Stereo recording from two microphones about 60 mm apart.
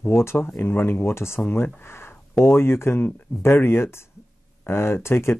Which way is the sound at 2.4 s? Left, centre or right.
Left.